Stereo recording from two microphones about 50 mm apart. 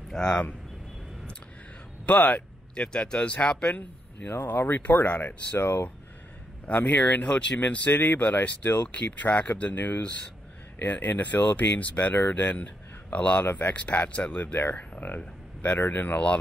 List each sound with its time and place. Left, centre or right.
0.1 s speech: centre
2.0 s speech: left
2.7 s speech: centre
4.6 s speech: left
4.8 s speech: left
5.2 s speech: left
15.8 s speech: left